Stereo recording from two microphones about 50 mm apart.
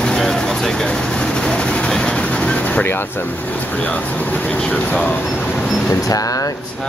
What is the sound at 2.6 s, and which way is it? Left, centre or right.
Vehicle, left.